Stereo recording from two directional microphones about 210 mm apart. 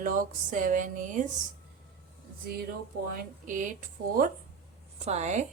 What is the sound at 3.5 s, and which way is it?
Speech, 40° right (ahead or behind).